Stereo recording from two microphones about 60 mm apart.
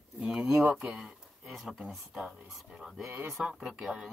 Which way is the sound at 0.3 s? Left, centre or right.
Centre.